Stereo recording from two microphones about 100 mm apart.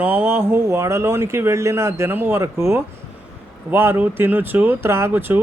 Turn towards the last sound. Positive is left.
turn(degrees=-20)  # may be behind; listen again after turning